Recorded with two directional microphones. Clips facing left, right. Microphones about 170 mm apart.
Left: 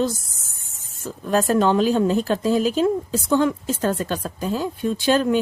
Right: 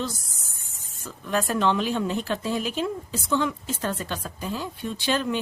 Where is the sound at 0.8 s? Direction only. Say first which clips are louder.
Left 8 dB; 45° left (ahead or behind).